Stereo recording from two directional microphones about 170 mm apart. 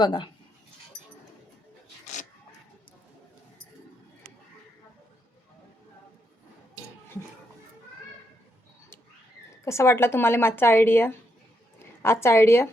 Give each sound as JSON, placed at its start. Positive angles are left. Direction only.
{"t": 0.0, "sound": "speech", "side_deg": 25}
{"t": 9.6, "sound": "a woman's voice", "side_deg": 15}